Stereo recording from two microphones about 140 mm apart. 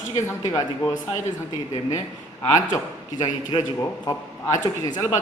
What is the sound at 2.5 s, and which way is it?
Speech, 25° left (ahead or behind).